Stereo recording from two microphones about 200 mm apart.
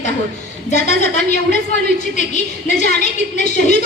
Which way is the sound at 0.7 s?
35° left (ahead or behind).